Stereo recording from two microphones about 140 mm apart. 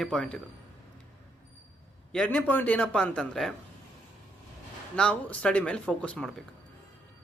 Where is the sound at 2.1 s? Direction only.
10° left (ahead or behind).